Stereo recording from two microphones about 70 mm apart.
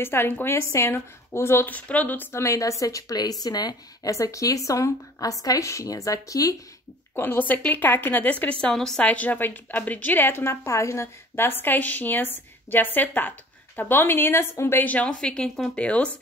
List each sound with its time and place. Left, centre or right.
0.0 s a woman's voice: left
1.7 s a woman's voice: left
2.3 s a woman's voice: left
4.1 s a woman's voice: left
7.2 s a woman's voice: left; by 9.0 s centre
9.0 s a woman's voice: left
14.9 s a woman's voice: left
15.1 s speech: centre
15.7 s speech: centre